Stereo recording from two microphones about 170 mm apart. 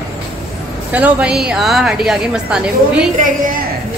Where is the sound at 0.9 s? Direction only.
5° right (ahead or behind).